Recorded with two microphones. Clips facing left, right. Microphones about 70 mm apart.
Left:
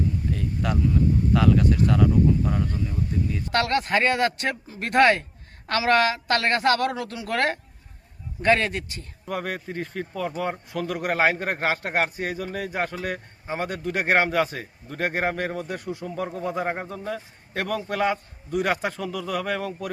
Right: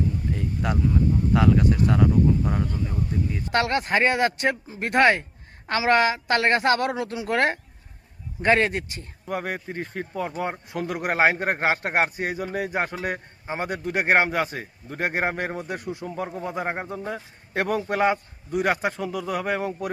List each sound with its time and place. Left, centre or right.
0.3 s a sound: centre
1.3 s a man's voice: centre
9.2 s a man's voice: centre
17.0 s a woman's voice: right
18.5 s a man's voice: centre